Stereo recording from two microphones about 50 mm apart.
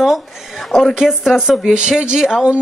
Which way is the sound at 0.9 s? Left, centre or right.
Centre.